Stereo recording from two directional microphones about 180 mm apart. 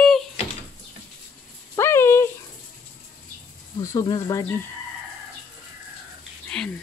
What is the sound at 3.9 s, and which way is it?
Speech, 20° left (ahead or behind).